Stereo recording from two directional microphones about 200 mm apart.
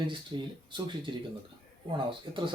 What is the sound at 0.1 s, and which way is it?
Speech, 25° right (ahead or behind).